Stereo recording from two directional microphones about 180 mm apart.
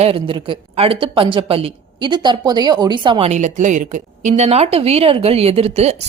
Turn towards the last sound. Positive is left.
turn(degrees=-35)  # may be behind; listen again after turning